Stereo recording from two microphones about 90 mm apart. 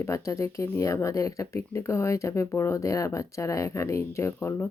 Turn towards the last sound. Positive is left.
turn(degrees=25)  # may be behind; listen again after turning